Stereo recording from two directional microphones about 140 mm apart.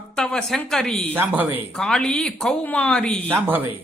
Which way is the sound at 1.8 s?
5° left (ahead or behind).